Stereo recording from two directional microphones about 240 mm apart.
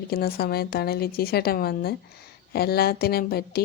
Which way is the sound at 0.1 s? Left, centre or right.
Left.